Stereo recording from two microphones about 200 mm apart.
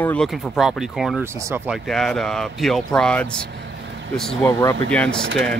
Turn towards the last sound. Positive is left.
turn(degrees=-65)  # may be behind; listen again after turning